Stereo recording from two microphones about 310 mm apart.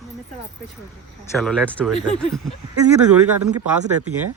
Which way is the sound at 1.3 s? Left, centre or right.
Centre.